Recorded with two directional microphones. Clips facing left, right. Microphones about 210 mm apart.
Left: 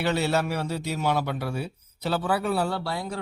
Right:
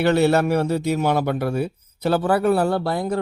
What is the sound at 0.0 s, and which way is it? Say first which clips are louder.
Speech: right 8 dB; 55° right (ahead or behind).